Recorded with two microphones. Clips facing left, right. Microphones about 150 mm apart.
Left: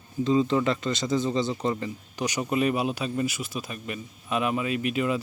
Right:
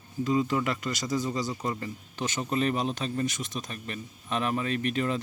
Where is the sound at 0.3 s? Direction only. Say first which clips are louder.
Left 4 dB; 25° left (ahead or behind).